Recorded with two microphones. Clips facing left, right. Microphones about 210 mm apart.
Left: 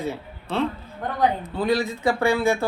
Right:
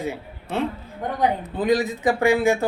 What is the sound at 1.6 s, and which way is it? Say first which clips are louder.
A woman's voice: right 2 dB; 15° right (ahead or behind).